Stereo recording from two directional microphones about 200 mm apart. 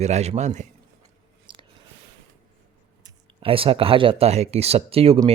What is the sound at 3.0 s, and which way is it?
A man's voice, 20° right (ahead or behind).